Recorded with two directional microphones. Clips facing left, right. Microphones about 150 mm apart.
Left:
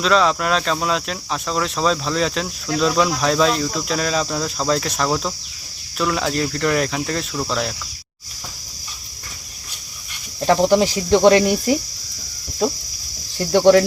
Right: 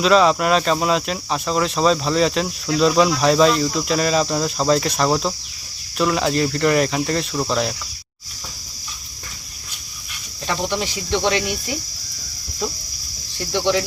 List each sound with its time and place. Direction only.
0.0 s speech: 5° right (ahead or behind)
10.4 s speech: 40° left (ahead or behind)
13.5 s speech: 50° left (ahead or behind)